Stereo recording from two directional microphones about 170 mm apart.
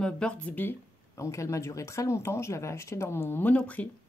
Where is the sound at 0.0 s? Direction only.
5° left (ahead or behind).